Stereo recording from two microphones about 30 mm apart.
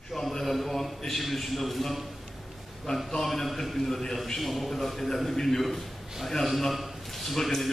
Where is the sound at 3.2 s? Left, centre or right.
Centre.